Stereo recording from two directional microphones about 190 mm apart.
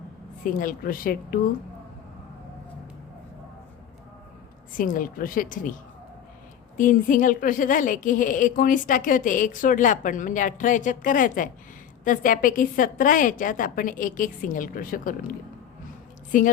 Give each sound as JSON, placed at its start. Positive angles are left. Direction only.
{"t": 0.4, "sound": "a woman's voice", "side_deg": 45}
{"t": 4.8, "sound": "a woman's voice", "side_deg": 45}
{"t": 6.7, "sound": "a woman's voice", "side_deg": 45}
{"t": 16.3, "sound": "a woman's voice", "side_deg": 45}